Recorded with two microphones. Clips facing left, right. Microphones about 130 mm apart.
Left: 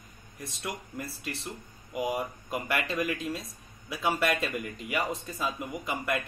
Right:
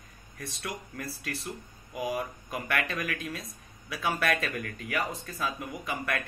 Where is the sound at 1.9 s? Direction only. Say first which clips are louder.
Left 1 dB; 25° left (ahead or behind).